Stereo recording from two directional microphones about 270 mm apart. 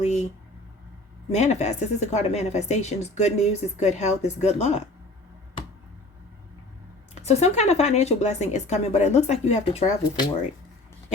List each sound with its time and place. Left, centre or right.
0.0 s a sound: left
1.3 s a woman's voice: left
7.2 s a woman's voice: left